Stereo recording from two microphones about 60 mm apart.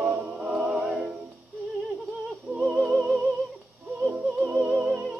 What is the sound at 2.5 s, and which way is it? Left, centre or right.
Music, centre.